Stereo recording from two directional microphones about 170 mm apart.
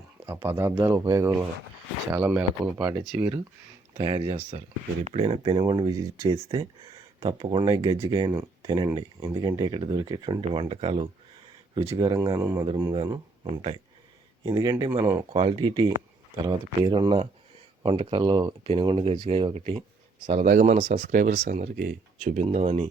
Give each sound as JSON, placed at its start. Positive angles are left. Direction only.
{"t": 0.3, "sound": "speech", "side_deg": -15}
{"t": 3.9, "sound": "speech", "side_deg": -30}
{"t": 11.7, "sound": "speech", "side_deg": -20}
{"t": 13.5, "sound": "speech", "side_deg": -35}
{"t": 14.4, "sound": "speech", "side_deg": -25}
{"t": 15.3, "sound": "speech", "side_deg": -30}
{"t": 20.4, "sound": "speech", "side_deg": -45}